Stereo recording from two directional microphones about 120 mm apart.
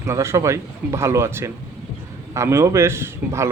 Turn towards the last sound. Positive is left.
turn(degrees=-20)  # may be behind; listen again after turning